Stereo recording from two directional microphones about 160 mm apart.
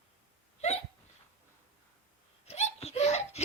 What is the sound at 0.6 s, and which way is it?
Hiccup, 45° left (ahead or behind).